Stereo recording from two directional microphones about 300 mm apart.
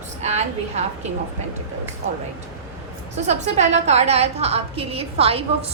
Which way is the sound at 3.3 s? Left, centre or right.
Right.